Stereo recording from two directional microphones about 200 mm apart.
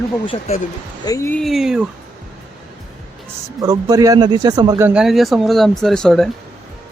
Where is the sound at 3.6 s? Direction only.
20° right (ahead or behind).